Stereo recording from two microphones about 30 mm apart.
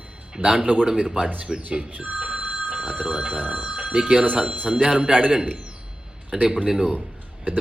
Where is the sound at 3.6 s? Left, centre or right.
Right.